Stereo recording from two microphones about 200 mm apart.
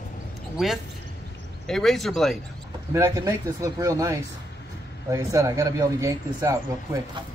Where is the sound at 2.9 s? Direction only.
15° right (ahead or behind).